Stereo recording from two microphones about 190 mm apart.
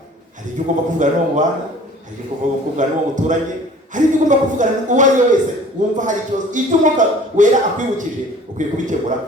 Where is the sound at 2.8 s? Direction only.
40° right (ahead or behind).